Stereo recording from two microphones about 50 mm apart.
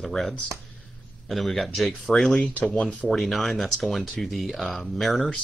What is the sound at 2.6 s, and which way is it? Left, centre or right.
Speech, left.